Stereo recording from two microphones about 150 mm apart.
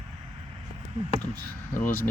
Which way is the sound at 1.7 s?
10° left (ahead or behind).